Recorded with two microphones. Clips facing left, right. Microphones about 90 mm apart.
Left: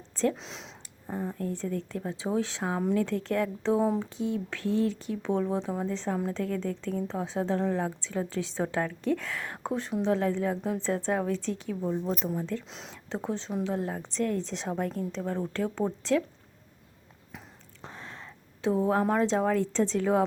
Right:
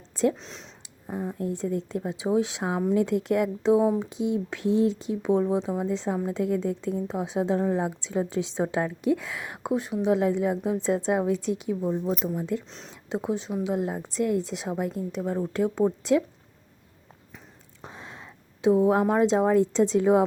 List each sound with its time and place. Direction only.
0.3 s a sound: centre (ahead or behind)
1.1 s a woman's voice: 15° right (ahead or behind)
4.0 s a woman's voice: 20° right (ahead or behind)
12.6 s speech: centre (ahead or behind)
13.1 s a woman's voice: 10° right (ahead or behind)
17.8 s speech: 15° right (ahead or behind)